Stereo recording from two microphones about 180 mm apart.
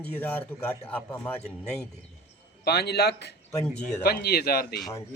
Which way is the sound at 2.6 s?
65° left (ahead or behind).